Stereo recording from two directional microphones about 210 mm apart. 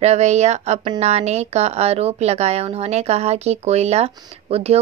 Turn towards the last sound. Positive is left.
turn(degrees=-30)  # may be behind; listen again after turning